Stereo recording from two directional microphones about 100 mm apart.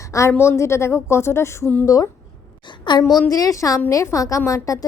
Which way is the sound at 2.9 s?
50° left (ahead or behind).